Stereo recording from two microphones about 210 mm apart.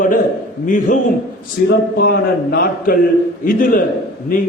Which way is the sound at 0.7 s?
40° left (ahead or behind).